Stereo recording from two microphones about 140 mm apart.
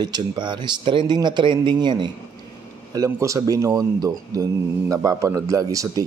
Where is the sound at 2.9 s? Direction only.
25° right (ahead or behind).